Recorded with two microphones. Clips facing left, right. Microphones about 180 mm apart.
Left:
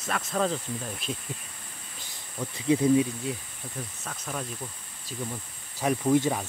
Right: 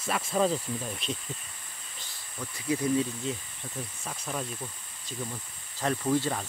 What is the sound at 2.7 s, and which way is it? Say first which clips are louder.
Speech: left 5 dB; 25° left (ahead or behind).